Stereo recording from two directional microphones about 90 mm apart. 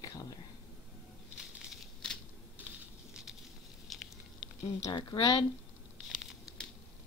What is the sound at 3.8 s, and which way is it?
Patter, centre (ahead or behind).